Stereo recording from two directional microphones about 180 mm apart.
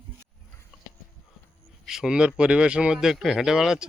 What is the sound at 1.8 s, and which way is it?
Speech, 5° right (ahead or behind).